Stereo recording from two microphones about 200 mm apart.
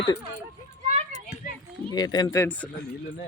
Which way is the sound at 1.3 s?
35° left (ahead or behind).